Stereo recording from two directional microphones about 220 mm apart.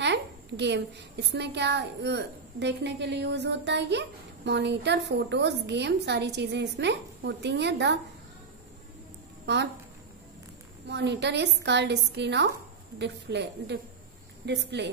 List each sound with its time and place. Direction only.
0.0 s a child's voice: 50° right (ahead or behind)
10.9 s a child's voice: 50° right (ahead or behind)